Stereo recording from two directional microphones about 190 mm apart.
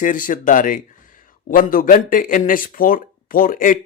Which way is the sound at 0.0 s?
45° left (ahead or behind).